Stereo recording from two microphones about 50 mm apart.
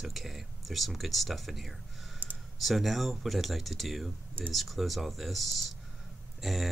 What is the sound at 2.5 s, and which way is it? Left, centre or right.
Speech, centre.